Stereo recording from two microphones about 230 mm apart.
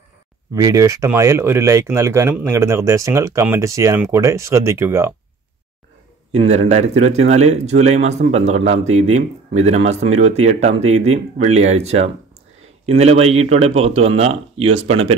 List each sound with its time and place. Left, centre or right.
0.6 s speech: centre
6.3 s speech: right